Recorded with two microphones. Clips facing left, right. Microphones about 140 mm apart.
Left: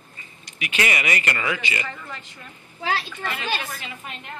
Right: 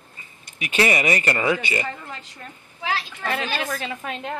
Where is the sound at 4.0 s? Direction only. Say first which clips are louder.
Right 8 dB; 90° right.